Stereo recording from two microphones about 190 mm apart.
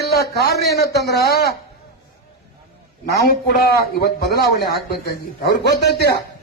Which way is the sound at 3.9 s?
55° left (ahead or behind).